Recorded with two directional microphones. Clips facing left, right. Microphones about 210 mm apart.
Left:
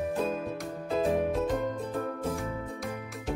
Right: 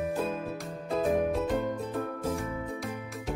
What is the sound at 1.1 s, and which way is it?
Music, centre (ahead or behind).